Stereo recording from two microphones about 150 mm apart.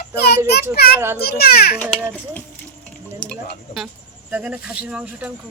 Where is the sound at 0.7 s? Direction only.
90° left.